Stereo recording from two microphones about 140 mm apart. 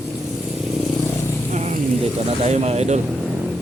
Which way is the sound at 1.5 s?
55° right (ahead or behind).